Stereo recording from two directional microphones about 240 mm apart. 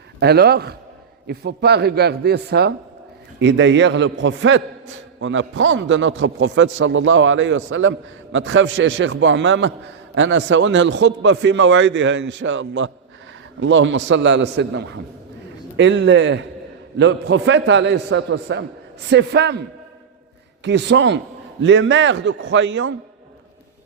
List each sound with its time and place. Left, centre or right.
0.2 s a man's voice: right
20.7 s a man's voice: right